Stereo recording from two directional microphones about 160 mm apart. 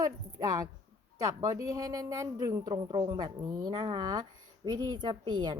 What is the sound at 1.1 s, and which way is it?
A woman's voice, 20° right (ahead or behind).